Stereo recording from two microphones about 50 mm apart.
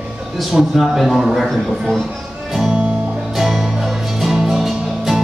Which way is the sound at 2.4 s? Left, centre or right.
Centre.